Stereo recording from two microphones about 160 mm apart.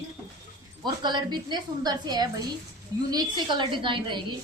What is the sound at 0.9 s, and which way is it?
A woman's voice, 25° right (ahead or behind).